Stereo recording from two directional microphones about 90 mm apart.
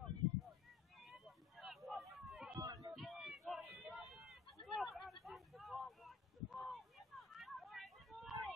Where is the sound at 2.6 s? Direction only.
40° right (ahead or behind).